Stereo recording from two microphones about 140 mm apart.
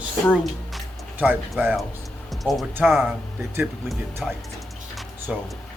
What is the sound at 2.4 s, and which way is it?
Speech, centre (ahead or behind).